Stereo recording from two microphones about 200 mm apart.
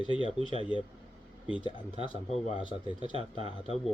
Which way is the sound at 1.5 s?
25° left (ahead or behind).